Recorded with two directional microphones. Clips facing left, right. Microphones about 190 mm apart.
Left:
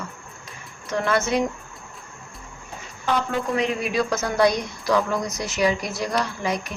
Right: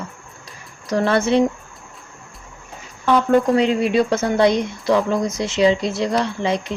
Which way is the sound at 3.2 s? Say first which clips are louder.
Right 10 dB; 50° right (ahead or behind).